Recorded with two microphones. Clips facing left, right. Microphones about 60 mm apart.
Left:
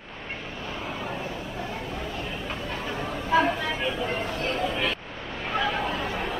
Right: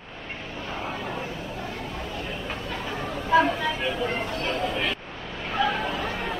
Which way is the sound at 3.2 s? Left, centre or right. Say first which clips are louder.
Right 2 dB; centre.